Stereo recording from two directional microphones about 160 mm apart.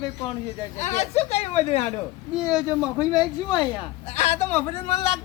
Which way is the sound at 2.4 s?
25° left (ahead or behind).